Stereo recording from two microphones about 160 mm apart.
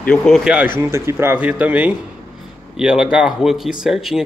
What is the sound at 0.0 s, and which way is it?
Speech, 5° left (ahead or behind).